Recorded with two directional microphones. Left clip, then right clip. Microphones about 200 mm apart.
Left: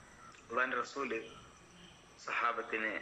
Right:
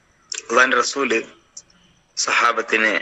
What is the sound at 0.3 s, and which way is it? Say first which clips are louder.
A man's voice: right 19 dB; 55° right (ahead or behind).